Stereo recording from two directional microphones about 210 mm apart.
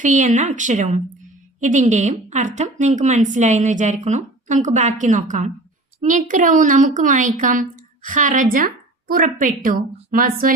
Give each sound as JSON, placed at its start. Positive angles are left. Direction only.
{"t": 0.0, "sound": "a woman's voice", "side_deg": -35}